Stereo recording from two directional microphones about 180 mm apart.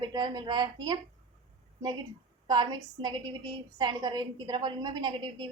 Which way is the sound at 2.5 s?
25° right (ahead or behind).